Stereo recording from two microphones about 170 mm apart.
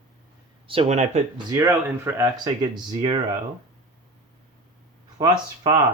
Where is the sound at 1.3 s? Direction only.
15° right (ahead or behind).